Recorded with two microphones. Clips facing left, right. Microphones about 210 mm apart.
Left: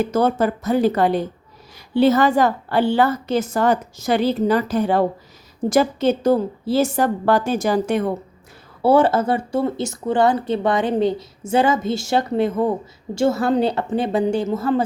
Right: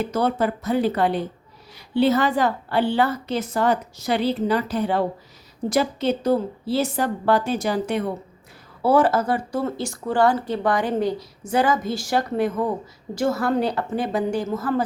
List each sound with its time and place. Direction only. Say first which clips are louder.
0.0 s a woman's voice: left 4 dB; 45° left (ahead or behind)
8.8 s a woman's voice: left 3 dB; 25° left (ahead or behind)